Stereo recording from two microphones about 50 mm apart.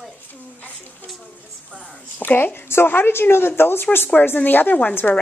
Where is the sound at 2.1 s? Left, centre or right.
Left.